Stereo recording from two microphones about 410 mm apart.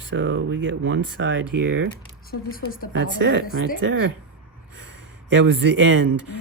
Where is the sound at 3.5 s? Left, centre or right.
Left.